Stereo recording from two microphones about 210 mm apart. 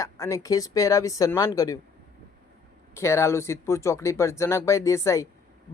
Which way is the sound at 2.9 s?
15° left (ahead or behind).